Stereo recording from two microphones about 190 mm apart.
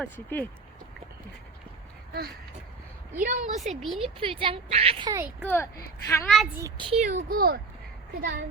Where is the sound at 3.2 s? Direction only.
40° right (ahead or behind).